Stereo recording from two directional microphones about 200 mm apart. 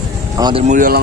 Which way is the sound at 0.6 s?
40° right (ahead or behind).